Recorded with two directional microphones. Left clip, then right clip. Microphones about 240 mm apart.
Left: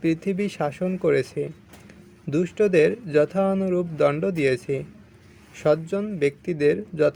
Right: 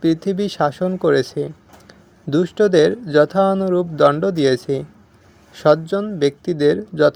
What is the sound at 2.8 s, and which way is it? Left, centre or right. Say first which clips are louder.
Speech: right 5 dB; right.